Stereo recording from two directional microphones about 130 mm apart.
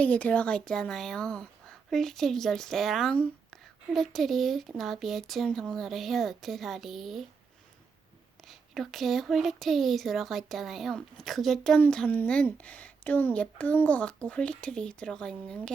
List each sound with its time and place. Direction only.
0.0 s speech: 10° left (ahead or behind)
8.4 s speech: centre (ahead or behind)